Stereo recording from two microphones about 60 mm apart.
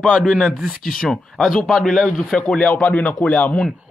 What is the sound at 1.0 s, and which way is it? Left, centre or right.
Speech, centre.